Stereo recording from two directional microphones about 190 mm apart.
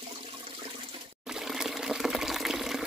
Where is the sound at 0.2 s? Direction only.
30° right (ahead or behind).